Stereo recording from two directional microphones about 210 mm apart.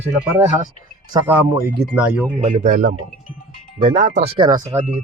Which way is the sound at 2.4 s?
35° right (ahead or behind).